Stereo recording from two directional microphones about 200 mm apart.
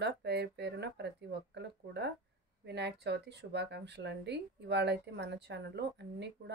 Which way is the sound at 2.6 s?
60° right (ahead or behind).